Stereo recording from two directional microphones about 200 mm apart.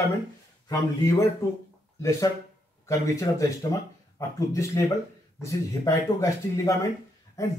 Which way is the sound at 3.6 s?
15° left (ahead or behind).